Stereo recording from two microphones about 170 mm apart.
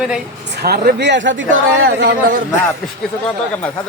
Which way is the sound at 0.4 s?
80° right.